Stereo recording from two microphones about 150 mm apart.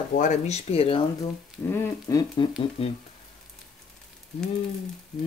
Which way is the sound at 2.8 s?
40° left (ahead or behind).